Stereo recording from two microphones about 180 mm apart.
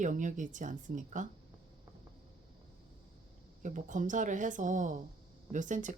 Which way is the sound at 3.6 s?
45° right (ahead or behind).